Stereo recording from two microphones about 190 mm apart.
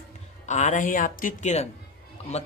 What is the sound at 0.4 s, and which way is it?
A man's voice, 40° left (ahead or behind).